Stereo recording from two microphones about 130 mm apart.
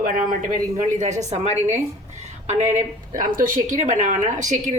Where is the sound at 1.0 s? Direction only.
65° right (ahead or behind).